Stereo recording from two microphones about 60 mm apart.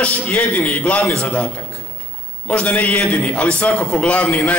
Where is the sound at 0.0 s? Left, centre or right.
Left.